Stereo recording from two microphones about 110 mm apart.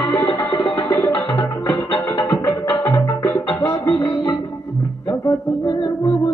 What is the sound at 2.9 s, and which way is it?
Music, 30° left (ahead or behind).